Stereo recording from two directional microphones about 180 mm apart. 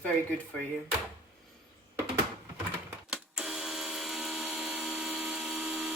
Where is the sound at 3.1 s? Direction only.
5° right (ahead or behind).